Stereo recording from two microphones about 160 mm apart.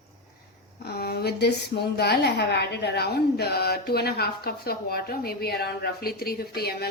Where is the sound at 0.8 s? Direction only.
80° left.